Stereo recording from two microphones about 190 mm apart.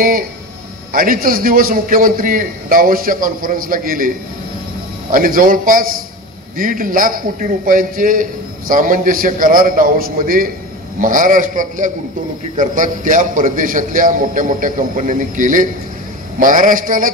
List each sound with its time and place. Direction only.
0.9 s a man's voice: 45° right (ahead or behind)
5.1 s a man's voice: 45° right (ahead or behind)